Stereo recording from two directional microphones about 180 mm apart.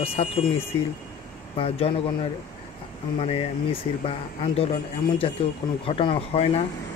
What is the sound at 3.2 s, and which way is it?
Speech, 30° left (ahead or behind).